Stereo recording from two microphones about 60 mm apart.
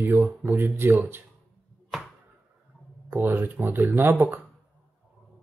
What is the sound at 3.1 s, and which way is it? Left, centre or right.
Speech, right.